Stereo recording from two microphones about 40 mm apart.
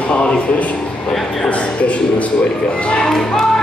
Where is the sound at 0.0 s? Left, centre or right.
Left.